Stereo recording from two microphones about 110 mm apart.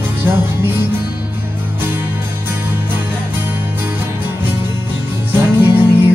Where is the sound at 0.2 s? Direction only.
20° right (ahead or behind).